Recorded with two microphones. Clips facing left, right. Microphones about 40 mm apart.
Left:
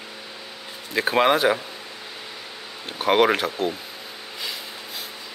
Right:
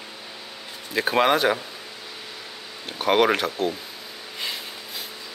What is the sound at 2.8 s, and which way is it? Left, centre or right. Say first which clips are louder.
Speech: left 1 dB; centre.